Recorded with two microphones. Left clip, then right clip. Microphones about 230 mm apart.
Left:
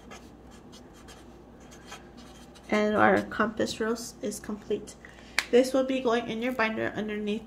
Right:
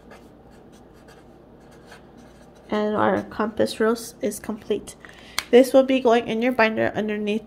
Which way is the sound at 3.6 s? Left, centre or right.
Right.